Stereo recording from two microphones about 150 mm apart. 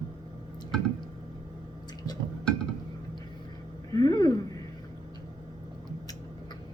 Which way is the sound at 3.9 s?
25° left (ahead or behind).